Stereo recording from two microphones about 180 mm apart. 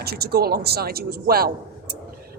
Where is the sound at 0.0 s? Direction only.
60° right (ahead or behind).